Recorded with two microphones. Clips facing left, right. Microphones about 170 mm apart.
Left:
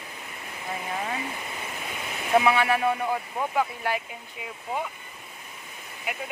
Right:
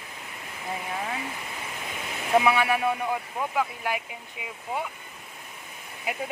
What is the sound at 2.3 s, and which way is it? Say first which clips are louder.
A man's voice: left 1 dB; 5° right (ahead or behind).